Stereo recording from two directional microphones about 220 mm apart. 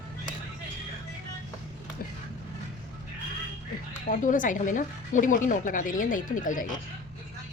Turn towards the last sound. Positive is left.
turn(degrees=35)  # may be behind; listen again after turning